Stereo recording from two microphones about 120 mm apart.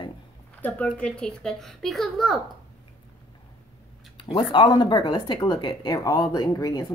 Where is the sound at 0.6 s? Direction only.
10° left (ahead or behind).